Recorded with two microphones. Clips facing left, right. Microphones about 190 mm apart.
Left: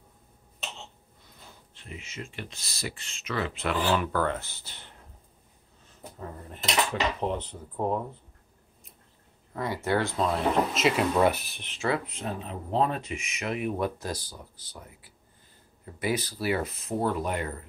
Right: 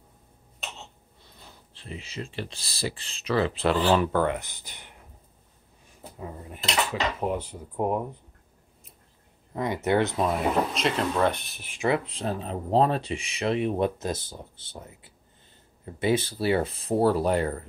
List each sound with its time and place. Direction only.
1.7 s speech: 30° right (ahead or behind); by 4.9 s 15° right (ahead or behind)
6.1 s speech: 10° right (ahead or behind)
9.5 s speech: 20° right (ahead or behind)
10.7 s speech: 5° left (ahead or behind)
11.7 s speech: 15° right (ahead or behind)
12.0 s speech: 30° right (ahead or behind)